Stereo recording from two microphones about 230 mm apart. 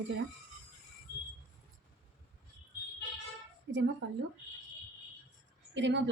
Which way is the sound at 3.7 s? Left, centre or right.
Right.